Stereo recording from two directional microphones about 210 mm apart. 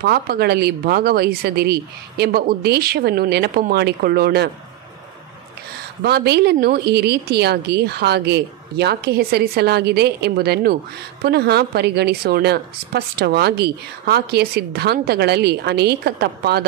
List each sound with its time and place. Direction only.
0.0 s a woman's voice: 50° right (ahead or behind)
6.0 s a woman's voice: 50° right (ahead or behind)